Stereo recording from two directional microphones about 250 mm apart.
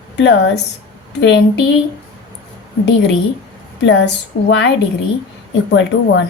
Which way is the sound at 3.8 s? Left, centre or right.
Left.